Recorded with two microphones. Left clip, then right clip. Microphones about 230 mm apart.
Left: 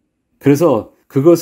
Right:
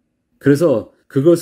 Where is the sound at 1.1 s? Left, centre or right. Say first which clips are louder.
Left 2 dB; left.